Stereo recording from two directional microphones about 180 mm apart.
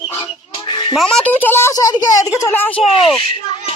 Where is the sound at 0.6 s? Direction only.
25° left (ahead or behind).